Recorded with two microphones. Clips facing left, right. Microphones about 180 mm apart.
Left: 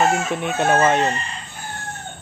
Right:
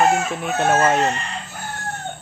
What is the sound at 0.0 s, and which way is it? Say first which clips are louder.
Speech: right 1 dB; centre (ahead or behind).